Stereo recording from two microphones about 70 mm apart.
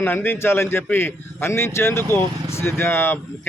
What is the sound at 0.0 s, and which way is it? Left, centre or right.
Speech, left.